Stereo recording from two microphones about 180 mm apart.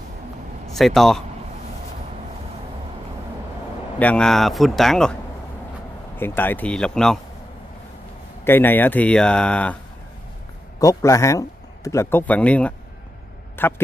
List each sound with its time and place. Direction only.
0.7 s speech: centre (ahead or behind)
4.0 s speech: 5° left (ahead or behind)
6.1 s speech: 10° left (ahead or behind)
8.5 s speech: 10° left (ahead or behind)
10.8 s a man's voice: 20° left (ahead or behind)